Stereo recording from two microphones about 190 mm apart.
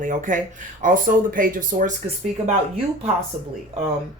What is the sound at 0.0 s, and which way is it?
Speech, 40° right (ahead or behind).